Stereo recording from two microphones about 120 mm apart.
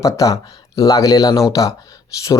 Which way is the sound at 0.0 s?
30° left (ahead or behind).